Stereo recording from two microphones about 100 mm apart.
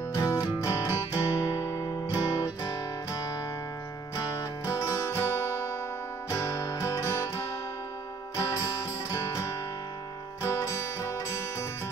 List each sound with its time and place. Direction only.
0.2 s music: 25° left (ahead or behind); by 3.3 s 45° left (ahead or behind)
4.3 s music: 35° left (ahead or behind)
9.1 s music: 30° left (ahead or behind)